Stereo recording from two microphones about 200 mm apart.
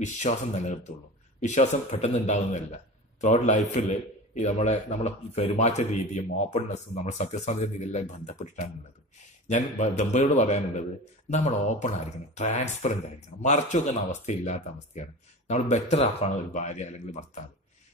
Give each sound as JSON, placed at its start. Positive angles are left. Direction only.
{"t": 0.0, "sound": "speech", "side_deg": 35}